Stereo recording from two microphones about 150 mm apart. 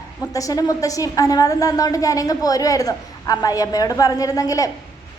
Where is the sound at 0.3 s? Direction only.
20° left (ahead or behind).